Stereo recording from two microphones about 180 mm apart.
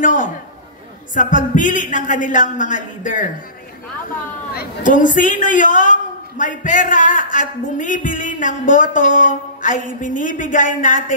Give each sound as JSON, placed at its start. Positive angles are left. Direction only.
{"t": 0.0, "sound": "a sound", "side_deg": 45}
{"t": 1.1, "sound": "a woman's voice", "side_deg": 45}
{"t": 4.6, "sound": "a woman's voice", "side_deg": 45}